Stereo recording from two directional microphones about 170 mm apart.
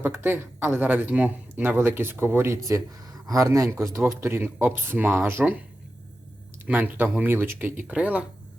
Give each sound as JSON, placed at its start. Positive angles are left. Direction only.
{"t": 0.0, "sound": "speech", "side_deg": -15}
{"t": 6.7, "sound": "speech", "side_deg": -10}